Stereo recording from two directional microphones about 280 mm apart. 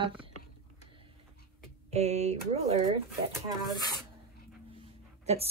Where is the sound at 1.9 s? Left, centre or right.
Right.